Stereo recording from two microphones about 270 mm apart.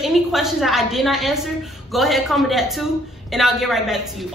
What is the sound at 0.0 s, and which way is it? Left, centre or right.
A woman's voice, centre.